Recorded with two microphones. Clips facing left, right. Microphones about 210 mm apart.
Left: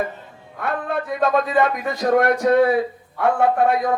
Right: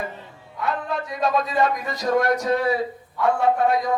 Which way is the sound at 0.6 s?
55° left (ahead or behind).